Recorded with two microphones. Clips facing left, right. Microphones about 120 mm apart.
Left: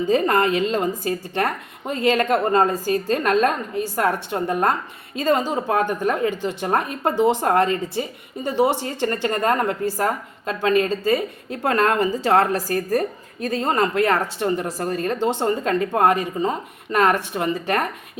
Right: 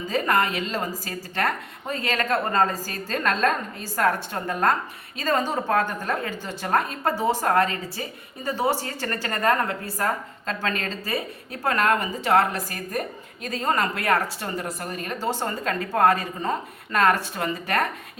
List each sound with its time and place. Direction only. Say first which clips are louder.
0.1 s a woman's voice: left 4 dB; 25° left (ahead or behind)